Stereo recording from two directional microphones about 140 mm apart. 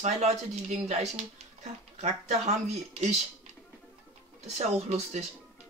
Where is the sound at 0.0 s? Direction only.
55° right (ahead or behind).